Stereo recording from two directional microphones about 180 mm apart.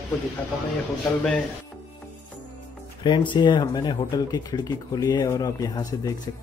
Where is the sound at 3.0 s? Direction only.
25° left (ahead or behind).